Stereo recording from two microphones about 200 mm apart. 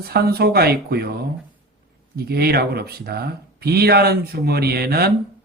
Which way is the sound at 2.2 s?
50° right (ahead or behind).